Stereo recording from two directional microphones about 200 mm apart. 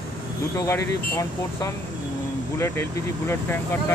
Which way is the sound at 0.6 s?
15° left (ahead or behind).